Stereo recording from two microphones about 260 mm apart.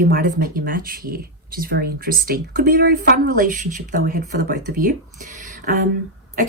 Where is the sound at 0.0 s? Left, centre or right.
Right.